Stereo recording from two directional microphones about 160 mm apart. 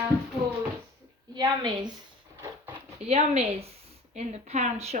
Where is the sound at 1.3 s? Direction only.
25° right (ahead or behind).